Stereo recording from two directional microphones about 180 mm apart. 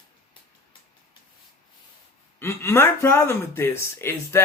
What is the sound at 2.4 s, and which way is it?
Speech, 15° left (ahead or behind).